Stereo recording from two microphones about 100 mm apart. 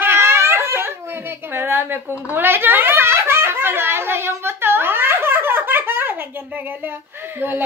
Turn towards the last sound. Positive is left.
turn(degrees=-20)  # may be behind; listen again after turning